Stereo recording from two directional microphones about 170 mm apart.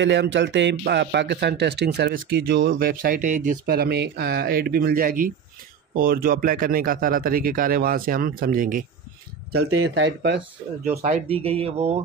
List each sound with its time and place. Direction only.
0.0 s speech: 90° right; by 3.5 s 50° right (ahead or behind)
3.6 s speech: 70° right (ahead or behind); by 8.8 s 55° right (ahead or behind)
9.5 s speech: 80° right
10.8 s speech: 40° right (ahead or behind)